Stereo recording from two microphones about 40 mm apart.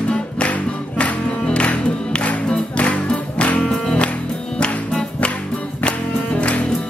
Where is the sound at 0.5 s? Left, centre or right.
Left.